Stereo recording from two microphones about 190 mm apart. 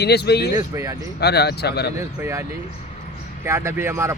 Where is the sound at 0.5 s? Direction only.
20° right (ahead or behind).